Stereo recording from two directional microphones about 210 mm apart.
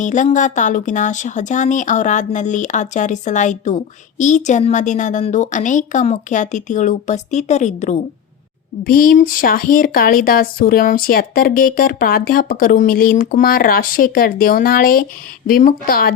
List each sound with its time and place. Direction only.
0.0 s a woman's voice: 35° left (ahead or behind)